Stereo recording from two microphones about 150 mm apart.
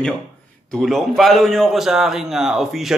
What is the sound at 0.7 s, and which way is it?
A man's voice, centre (ahead or behind).